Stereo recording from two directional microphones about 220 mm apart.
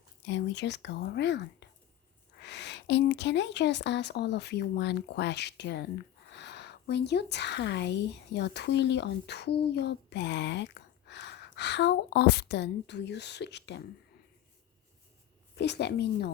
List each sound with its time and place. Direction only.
0.3 s speech: 50° left (ahead or behind)
15.5 s speech: 50° left (ahead or behind)